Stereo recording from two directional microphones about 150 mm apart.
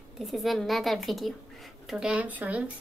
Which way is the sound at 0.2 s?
Centre (ahead or behind).